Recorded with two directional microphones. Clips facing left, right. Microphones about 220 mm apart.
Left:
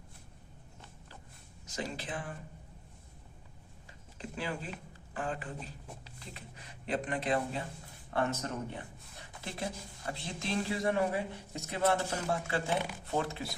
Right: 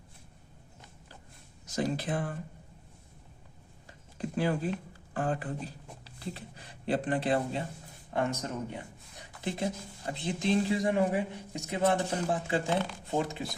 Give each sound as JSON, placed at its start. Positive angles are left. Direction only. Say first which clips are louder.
{"t": 1.7, "sound": "speech", "louder": "right 8 dB", "side_deg": -40}
{"t": 4.2, "sound": "a sound", "louder": "right 8 dB", "side_deg": -45}
{"t": 5.1, "sound": "speech", "louder": "right 6 dB", "side_deg": -40}
{"t": 8.1, "sound": "speech", "louder": "right 2 dB", "side_deg": -15}
{"t": 12.7, "sound": "speech", "louder": "right 3 dB", "side_deg": 10}
{"t": 13.1, "sound": "speech", "louder": "right 2 dB", "side_deg": -15}